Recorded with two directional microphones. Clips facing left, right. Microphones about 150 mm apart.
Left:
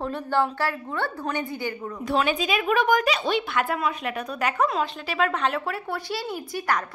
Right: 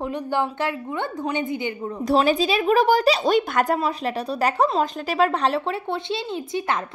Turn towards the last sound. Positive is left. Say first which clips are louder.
# right 2 dB
turn(degrees=-25)  # may be behind; listen again after turning